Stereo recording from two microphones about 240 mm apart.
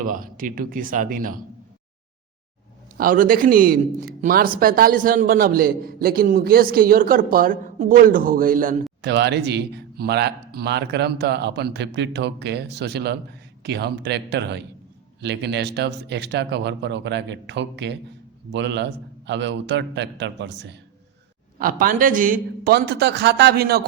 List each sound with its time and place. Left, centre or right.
0.0 s a man's voice: right
3.0 s a man's voice: right
21.6 s a man's voice: right